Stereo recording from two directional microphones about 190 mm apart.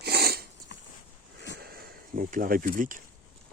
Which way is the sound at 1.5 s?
55° right (ahead or behind).